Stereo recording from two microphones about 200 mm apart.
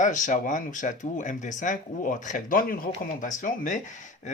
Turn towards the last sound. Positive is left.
turn(degrees=40)  # may be behind; listen again after turning